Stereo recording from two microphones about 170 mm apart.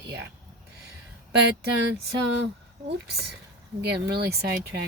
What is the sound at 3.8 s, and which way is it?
Speech, 70° right (ahead or behind).